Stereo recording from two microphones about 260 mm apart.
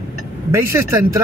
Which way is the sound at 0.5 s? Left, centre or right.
Centre.